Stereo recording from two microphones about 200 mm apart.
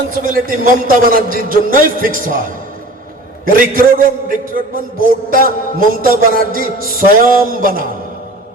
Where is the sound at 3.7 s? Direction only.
45° right (ahead or behind).